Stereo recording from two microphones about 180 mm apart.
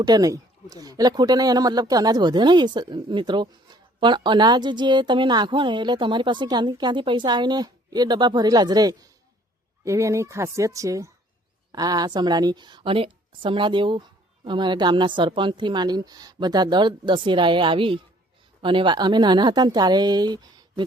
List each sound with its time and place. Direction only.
0.0 s speech: 20° right (ahead or behind)